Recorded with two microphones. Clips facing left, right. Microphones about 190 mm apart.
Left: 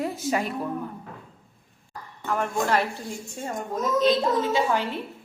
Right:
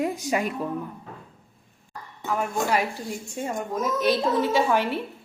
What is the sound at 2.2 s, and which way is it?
A woman's voice, 5° right (ahead or behind).